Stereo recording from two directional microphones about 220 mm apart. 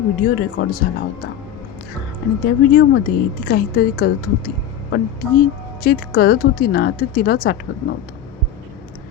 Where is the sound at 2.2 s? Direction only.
45° left (ahead or behind).